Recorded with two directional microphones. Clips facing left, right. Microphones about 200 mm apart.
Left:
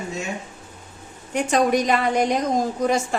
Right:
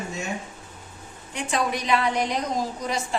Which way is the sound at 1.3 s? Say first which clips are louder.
Left 8 dB; 45° left (ahead or behind).